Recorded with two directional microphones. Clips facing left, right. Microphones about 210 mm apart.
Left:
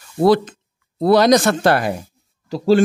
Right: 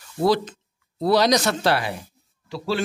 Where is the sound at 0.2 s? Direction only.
55° left (ahead or behind).